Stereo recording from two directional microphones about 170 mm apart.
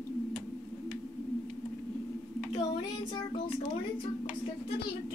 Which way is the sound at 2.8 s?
25° left (ahead or behind).